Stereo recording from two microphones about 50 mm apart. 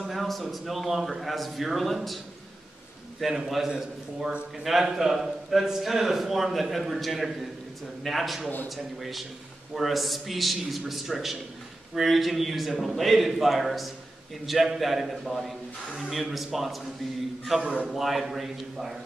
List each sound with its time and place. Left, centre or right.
0.1 s a man's voice: centre
3.2 s a man's voice: centre
17.6 s a man's voice: right
17.9 s a man's voice: centre